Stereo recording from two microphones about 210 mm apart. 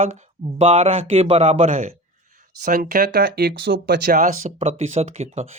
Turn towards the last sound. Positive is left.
turn(degrees=-30)  # may be behind; listen again after turning